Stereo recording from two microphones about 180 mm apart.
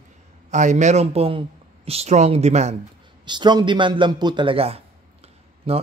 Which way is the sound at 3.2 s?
25° right (ahead or behind).